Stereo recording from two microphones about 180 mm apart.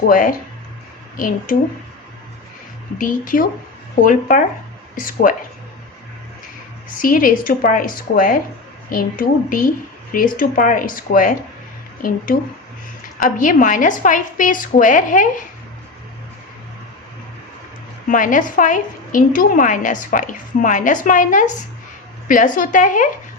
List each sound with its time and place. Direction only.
0.1 s a woman's voice: 50° left (ahead or behind)
3.0 s a woman's voice: 50° left (ahead or behind)
7.0 s a woman's voice: 50° left (ahead or behind)
18.1 s a woman's voice: 45° left (ahead or behind)